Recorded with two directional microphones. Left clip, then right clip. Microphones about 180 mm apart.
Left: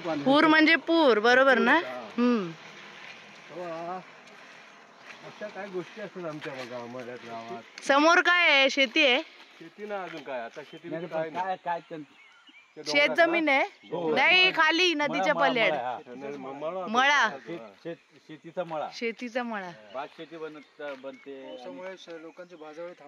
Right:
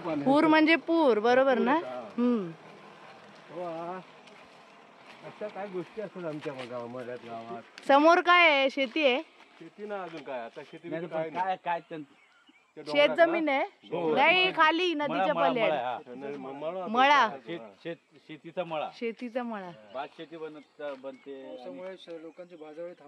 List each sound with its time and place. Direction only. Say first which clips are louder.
0.2 s speech: left 2 dB; 5° right (ahead or behind)
6.9 s speech: even; 10° left (ahead or behind)
7.8 s speech: even; 10° right (ahead or behind)
9.8 s speech: left 2 dB; 40° left (ahead or behind)
12.8 s speech: even; 10° left (ahead or behind)
13.8 s speech: even; 40° left (ahead or behind)
14.1 s speech: left 2 dB; 10° left (ahead or behind)
15.7 s speech: even; 45° left (ahead or behind)
16.9 s speech: right 1 dB; centre (ahead or behind)
18.5 s speech: left 1 dB; 40° left (ahead or behind)
19.2 s speech: left 3 dB; 10° left (ahead or behind)
19.9 s speech: left 1 dB; 40° left (ahead or behind)
21.5 s speech: left 1 dB; 30° left (ahead or behind)